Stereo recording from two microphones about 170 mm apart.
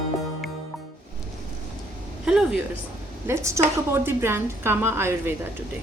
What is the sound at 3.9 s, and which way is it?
A woman's voice, 15° right (ahead or behind).